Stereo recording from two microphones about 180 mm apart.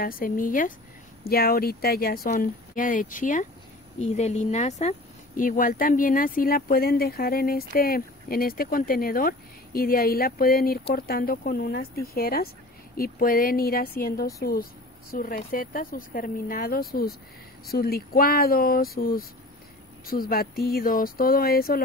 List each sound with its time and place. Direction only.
0.0 s a woman's voice: 50° left (ahead or behind)